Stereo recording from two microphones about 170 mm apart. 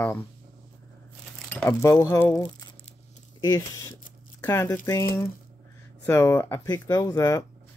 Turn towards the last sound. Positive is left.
turn(degrees=20)  # may be behind; listen again after turning